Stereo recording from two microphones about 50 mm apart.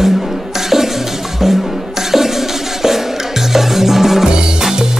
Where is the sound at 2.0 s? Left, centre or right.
Centre.